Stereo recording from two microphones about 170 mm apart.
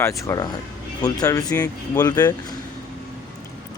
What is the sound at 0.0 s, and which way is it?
Speech, 20° left (ahead or behind).